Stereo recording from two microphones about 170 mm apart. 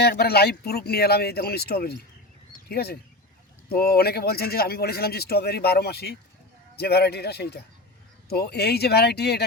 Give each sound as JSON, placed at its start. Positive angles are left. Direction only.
{"t": 0.0, "sound": "speech", "side_deg": 70}